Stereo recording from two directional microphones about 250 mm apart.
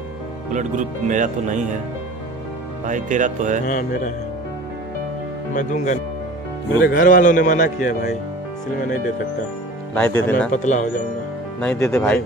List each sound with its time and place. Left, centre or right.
0.5 s speech: right
2.8 s speech: right
3.6 s music: left
5.5 s a man's voice: left
9.9 s speech: centre
10.5 s music: left
11.8 s speech: centre